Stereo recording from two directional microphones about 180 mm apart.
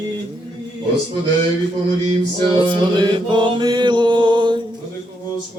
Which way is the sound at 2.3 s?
25° right (ahead or behind).